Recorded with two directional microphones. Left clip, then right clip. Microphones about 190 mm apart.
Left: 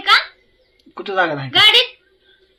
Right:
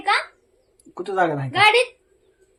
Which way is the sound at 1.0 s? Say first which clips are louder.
Left 3 dB; centre (ahead or behind).